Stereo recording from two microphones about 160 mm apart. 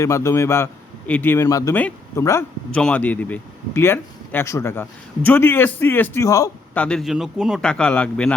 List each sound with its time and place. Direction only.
0.0 s speech: 20° left (ahead or behind)
6.7 s a man's voice: 5° left (ahead or behind)